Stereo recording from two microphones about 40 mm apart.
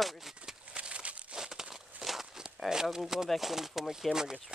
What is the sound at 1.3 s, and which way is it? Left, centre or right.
Crumpling, centre.